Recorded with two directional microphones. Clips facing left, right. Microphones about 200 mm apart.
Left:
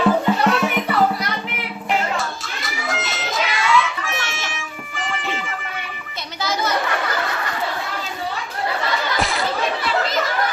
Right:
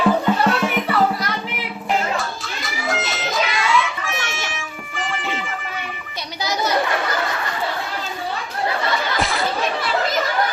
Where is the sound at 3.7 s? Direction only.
Centre (ahead or behind).